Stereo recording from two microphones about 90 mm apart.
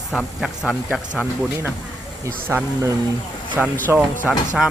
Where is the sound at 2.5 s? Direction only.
30° right (ahead or behind).